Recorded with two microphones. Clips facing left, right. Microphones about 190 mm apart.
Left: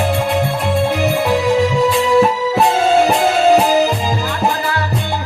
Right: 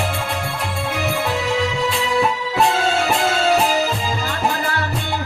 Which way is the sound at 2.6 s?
20° left (ahead or behind).